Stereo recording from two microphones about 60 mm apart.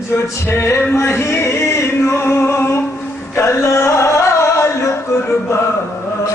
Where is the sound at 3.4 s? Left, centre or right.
Left.